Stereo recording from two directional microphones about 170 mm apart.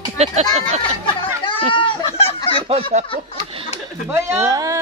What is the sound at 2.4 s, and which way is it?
Fowl, 30° left (ahead or behind).